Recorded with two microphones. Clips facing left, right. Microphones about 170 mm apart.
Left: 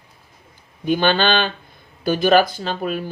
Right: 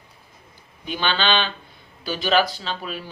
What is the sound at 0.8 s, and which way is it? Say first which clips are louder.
Speech: left 7 dB; 45° left (ahead or behind).